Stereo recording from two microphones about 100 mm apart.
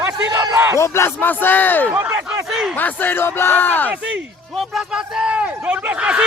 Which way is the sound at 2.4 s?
Centre (ahead or behind).